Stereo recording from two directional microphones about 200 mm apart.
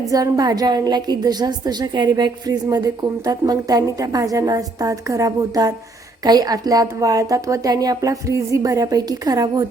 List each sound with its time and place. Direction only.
0.1 s a woman's voice: 20° right (ahead or behind)